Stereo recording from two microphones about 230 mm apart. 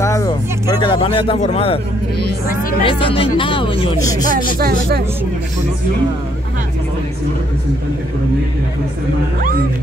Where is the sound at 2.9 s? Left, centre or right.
Left.